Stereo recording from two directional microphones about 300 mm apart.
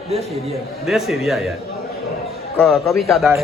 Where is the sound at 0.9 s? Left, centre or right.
Centre.